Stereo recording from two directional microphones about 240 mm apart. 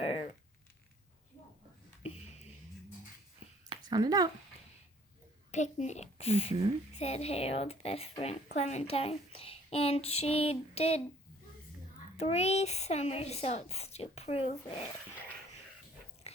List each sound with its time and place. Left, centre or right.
3.7 s a sound: centre
5.5 s a child's voice: left
12.1 s a child's voice: left
16.3 s dog: left